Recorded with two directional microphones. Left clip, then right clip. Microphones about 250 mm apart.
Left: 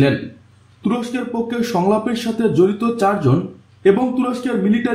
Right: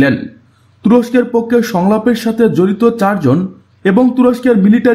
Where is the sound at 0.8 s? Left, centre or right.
Right.